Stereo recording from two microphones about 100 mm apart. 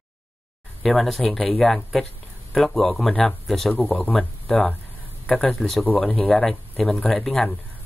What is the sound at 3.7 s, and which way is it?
Speech, 15° left (ahead or behind).